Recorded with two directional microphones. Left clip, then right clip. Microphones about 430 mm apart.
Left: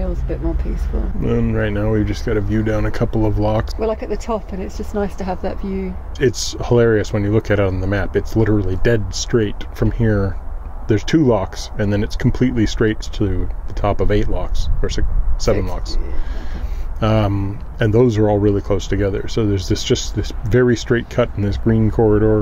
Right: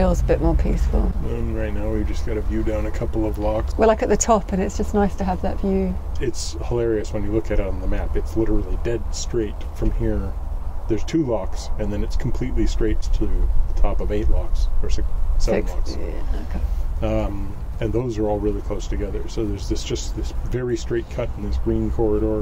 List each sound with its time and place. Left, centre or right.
0.3 s speech: right
1.5 s speech: left
3.8 s speech: right; by 5.9 s centre
6.1 s speech: left
17.0 s speech: left